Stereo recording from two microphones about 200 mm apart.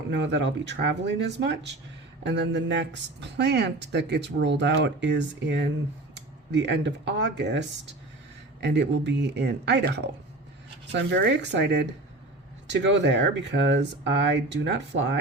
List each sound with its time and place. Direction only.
0.1 s speech: 60° right (ahead or behind)
8.6 s speech: 60° right (ahead or behind)